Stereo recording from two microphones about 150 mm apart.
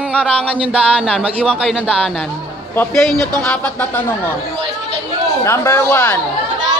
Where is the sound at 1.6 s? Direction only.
5° right (ahead or behind).